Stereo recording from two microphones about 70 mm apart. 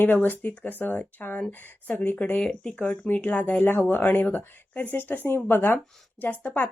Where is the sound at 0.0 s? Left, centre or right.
Left.